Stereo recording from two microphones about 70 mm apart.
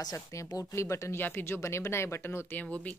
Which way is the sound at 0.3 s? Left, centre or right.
Left.